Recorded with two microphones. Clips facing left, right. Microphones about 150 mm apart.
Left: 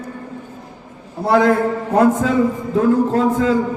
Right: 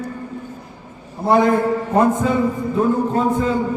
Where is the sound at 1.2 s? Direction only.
90° left.